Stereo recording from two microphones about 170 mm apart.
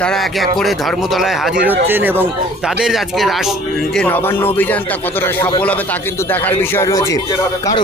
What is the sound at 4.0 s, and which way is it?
Speech, 10° left (ahead or behind).